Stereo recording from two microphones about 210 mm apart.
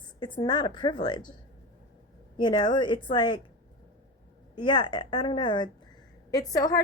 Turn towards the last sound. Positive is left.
turn(degrees=15)  # may be behind; listen again after turning